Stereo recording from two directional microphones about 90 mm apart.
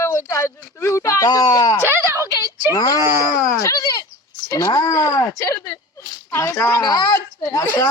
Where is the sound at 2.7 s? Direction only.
40° left (ahead or behind).